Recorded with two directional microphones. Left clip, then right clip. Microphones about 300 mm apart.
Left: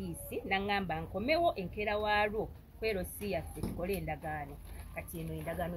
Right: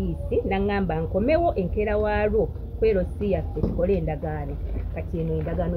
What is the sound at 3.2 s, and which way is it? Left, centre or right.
Speech, left.